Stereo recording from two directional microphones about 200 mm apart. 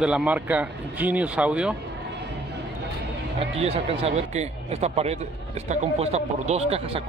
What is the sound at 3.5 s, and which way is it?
Speech, 30° right (ahead or behind).